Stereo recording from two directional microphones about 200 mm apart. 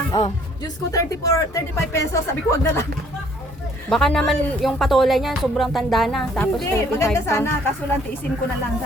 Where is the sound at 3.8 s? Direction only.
Centre (ahead or behind).